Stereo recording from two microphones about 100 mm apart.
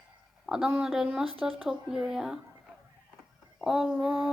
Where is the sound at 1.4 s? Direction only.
5° right (ahead or behind).